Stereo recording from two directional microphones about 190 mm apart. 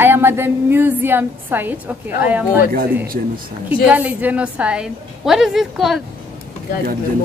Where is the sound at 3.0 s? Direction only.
50° right (ahead or behind).